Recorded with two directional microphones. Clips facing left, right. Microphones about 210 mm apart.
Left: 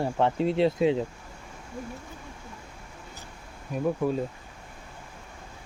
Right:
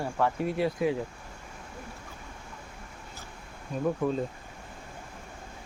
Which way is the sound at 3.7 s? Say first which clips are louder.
Left 2 dB; 5° left (ahead or behind).